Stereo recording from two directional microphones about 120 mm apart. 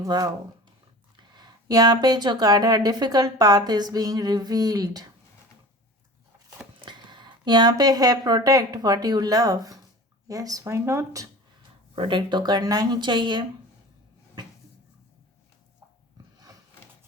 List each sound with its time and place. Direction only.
0.0 s speech: 30° right (ahead or behind)
6.8 s speech: 40° right (ahead or behind)
11.9 s speech: 45° right (ahead or behind)